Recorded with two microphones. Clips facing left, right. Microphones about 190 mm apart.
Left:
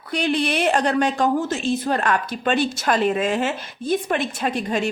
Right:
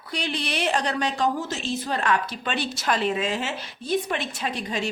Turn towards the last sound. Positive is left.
turn(degrees=50)  # may be behind; listen again after turning